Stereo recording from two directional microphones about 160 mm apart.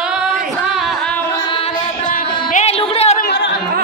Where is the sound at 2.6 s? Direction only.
40° left (ahead or behind).